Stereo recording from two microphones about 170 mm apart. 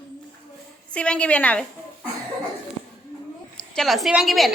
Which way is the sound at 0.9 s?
5° left (ahead or behind).